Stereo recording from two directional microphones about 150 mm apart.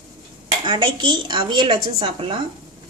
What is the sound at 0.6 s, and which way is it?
A woman's voice, 30° right (ahead or behind).